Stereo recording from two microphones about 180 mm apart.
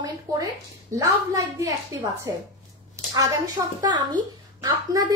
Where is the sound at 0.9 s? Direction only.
20° right (ahead or behind).